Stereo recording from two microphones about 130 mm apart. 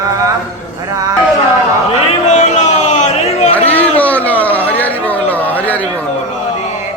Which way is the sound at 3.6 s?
10° left (ahead or behind).